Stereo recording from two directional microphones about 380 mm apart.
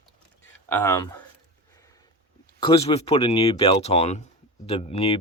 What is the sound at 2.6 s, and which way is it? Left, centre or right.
Speech, centre.